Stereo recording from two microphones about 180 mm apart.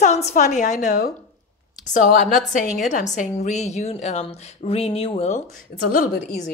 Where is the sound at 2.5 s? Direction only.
45° left (ahead or behind).